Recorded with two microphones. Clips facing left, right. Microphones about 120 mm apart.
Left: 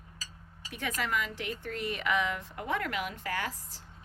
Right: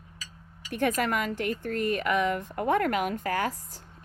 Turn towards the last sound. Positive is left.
turn(degrees=-45)  # may be behind; listen again after turning